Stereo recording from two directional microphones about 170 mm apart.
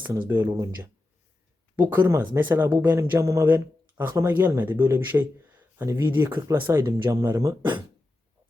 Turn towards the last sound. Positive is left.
turn(degrees=-25)  # may be behind; listen again after turning